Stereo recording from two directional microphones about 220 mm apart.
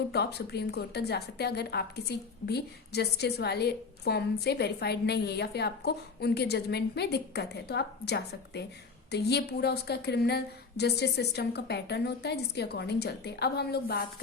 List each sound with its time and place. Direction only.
0.1 s a woman's voice: 50° left (ahead or behind)